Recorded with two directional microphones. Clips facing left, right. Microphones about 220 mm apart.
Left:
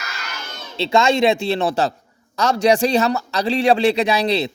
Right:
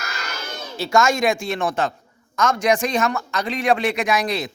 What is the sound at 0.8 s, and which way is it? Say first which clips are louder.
A man's voice: left 3 dB; 25° left (ahead or behind).